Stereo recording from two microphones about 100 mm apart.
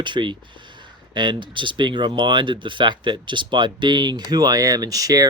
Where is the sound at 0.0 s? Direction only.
50° right (ahead or behind).